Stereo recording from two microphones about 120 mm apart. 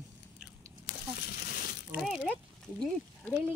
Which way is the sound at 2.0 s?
Centre (ahead or behind).